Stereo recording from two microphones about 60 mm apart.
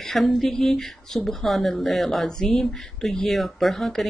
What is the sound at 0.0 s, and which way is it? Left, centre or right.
A woman's voice, centre.